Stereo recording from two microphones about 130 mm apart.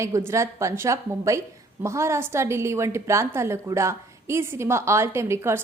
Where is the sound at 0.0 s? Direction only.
20° right (ahead or behind).